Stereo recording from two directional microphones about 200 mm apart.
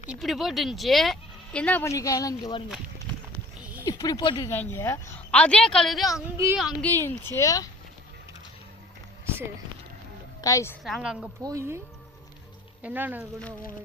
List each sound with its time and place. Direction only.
0.1 s speech: centre (ahead or behind); by 2.6 s 20° left (ahead or behind)
3.8 s speech: 20° left (ahead or behind); by 6.1 s centre (ahead or behind)
6.3 s speech: 15° right (ahead or behind)
6.6 s speech: centre (ahead or behind)
7.3 s speech: 15° left (ahead or behind)
9.2 s a sound: 10° right (ahead or behind)
10.4 s speech: 15° left (ahead or behind)
10.8 s speech: centre (ahead or behind)
11.4 s speech: 15° right (ahead or behind)
12.8 s speech: 10° right (ahead or behind)